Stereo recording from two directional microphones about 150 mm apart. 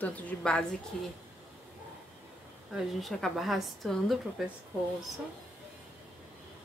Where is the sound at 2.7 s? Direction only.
Centre (ahead or behind).